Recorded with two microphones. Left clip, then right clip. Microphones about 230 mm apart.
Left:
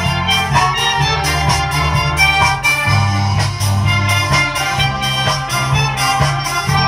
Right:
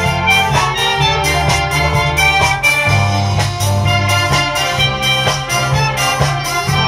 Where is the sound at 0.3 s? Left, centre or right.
Right.